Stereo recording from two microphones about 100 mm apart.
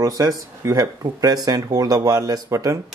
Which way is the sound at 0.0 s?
35° right (ahead or behind).